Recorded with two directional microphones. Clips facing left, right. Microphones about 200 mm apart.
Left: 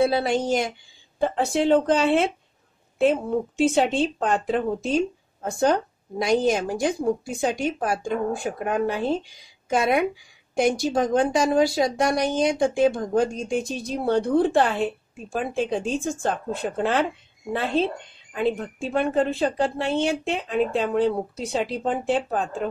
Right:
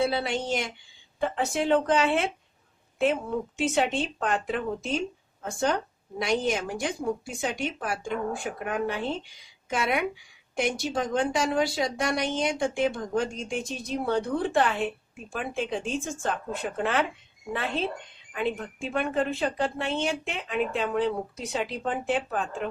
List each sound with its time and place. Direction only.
0.1 s a woman's voice: 40° left (ahead or behind)
18.3 s a woman's voice: 35° left (ahead or behind)